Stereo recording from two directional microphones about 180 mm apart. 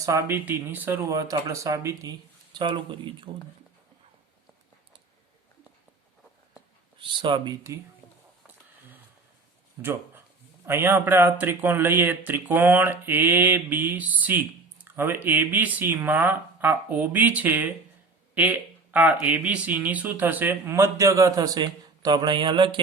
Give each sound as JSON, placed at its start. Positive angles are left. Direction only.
{"t": 0.0, "sound": "speech", "side_deg": -15}
{"t": 7.0, "sound": "speech", "side_deg": -25}
{"t": 8.4, "sound": "a sound", "side_deg": -10}
{"t": 9.8, "sound": "speech", "side_deg": -15}